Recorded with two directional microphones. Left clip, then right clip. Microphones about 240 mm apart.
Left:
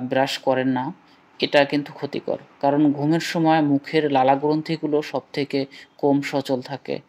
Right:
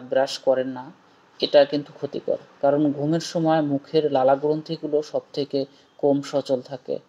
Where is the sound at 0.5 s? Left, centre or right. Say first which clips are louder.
Right 1 dB; left.